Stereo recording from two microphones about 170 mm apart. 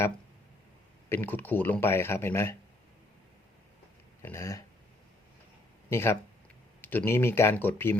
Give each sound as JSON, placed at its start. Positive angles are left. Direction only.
{"t": 1.1, "sound": "speech", "side_deg": 10}
{"t": 4.2, "sound": "a sound", "side_deg": 15}
{"t": 5.9, "sound": "speech", "side_deg": 15}